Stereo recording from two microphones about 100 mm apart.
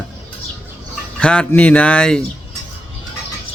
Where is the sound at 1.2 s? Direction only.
10° left (ahead or behind).